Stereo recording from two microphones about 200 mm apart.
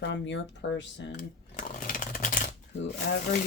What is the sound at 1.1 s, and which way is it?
Shuffling cards, 40° left (ahead or behind).